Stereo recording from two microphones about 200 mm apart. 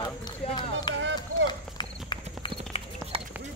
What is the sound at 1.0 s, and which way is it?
Speech, 65° right (ahead or behind).